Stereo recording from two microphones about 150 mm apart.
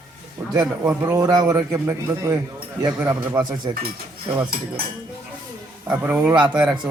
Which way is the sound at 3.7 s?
30° right (ahead or behind).